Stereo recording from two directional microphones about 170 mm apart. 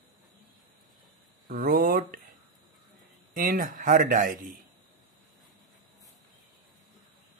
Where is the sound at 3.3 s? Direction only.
55° right (ahead or behind).